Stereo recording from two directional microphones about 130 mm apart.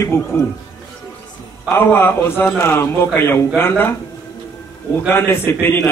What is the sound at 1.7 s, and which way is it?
A man's voice, 15° left (ahead or behind).